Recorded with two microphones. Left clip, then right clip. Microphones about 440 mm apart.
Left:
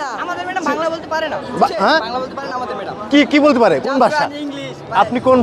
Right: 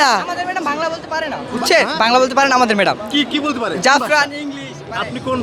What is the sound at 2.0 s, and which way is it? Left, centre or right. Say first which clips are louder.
Speech: right 8 dB; right.